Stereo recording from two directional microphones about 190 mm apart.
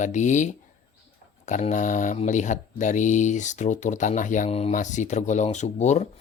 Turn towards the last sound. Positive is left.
turn(degrees=35)  # may be behind; listen again after turning